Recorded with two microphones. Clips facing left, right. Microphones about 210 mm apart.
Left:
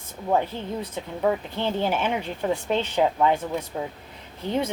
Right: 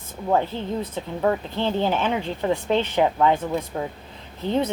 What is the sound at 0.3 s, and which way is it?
A woman's voice, 10° left (ahead or behind).